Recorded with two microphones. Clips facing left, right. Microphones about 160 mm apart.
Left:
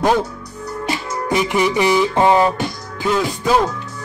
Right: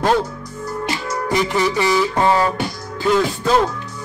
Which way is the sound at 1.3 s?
15° left (ahead or behind).